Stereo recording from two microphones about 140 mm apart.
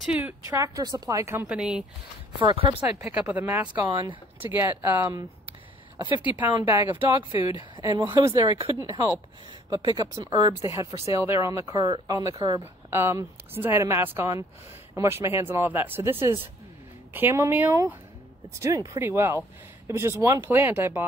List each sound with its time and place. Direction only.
0.0 s speech: 10° right (ahead or behind)
0.5 s speech: 25° right (ahead or behind)
1.5 s speech: 5° right (ahead or behind)
2.3 s speech: 35° right (ahead or behind)
3.1 s speech: 10° right (ahead or behind)
3.8 s speech: 30° right (ahead or behind)
4.5 s speech: 15° right (ahead or behind)
6.0 s speech: 35° left (ahead or behind)
6.3 s speech: 10° right (ahead or behind)
7.7 s a sound: 30° right (ahead or behind)
8.0 s speech: 20° right (ahead or behind)